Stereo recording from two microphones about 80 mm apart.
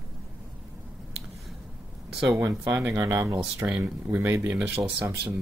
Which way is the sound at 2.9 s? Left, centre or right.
Right.